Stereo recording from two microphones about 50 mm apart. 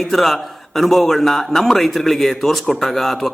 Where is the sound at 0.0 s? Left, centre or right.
Centre.